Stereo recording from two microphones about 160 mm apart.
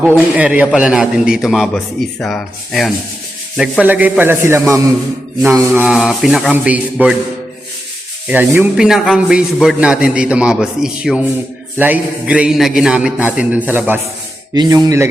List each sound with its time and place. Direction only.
0.3 s a man's voice: 10° right (ahead or behind)
3.6 s mantra: 10° right (ahead or behind)
8.3 s a man's voice: 10° right (ahead or behind)
11.8 s mantra: 10° right (ahead or behind)
14.5 s speech: 25° right (ahead or behind)